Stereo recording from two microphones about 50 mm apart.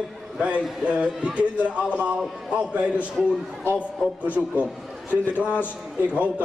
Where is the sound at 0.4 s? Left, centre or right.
Right.